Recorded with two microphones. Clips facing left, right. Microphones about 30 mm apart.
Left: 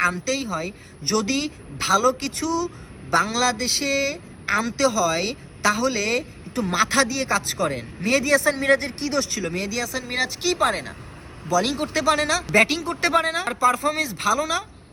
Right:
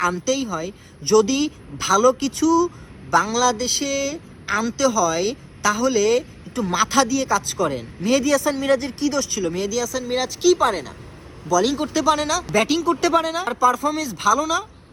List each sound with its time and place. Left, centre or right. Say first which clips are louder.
0.1 s speech: right 3 dB; left
0.4 s speech: right 1 dB; left
2.6 s speech: right 2 dB; left
4.4 s speech: right 1 dB; centre
4.9 s speech: right 2 dB; left
6.7 s speech: right 2 dB; centre
7.0 s speech: right 2 dB; left
9.0 s speech: right 3 dB; left
14.2 s speech: right 3 dB; left